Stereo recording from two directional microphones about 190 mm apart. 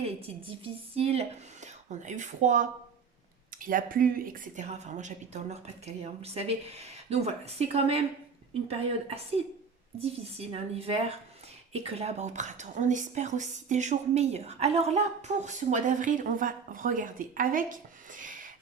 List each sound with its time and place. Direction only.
0.6 s speech: 30° right (ahead or behind)
10.0 s speech: 30° right (ahead or behind)